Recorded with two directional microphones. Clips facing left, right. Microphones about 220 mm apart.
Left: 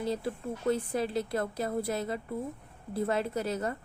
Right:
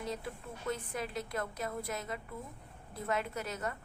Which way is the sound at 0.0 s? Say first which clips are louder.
Left 8 dB; 30° left (ahead or behind).